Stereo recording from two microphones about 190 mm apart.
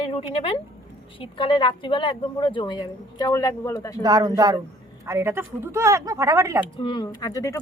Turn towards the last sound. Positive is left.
turn(degrees=15)  # may be behind; listen again after turning